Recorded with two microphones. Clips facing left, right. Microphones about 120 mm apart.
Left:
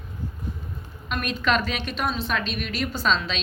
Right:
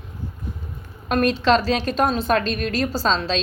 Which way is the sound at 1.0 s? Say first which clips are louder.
Right 8 dB; 40° right (ahead or behind).